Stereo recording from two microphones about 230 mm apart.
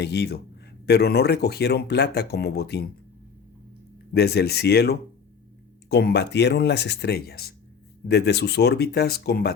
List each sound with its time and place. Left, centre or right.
0.0 s speech: left
4.1 s speech: left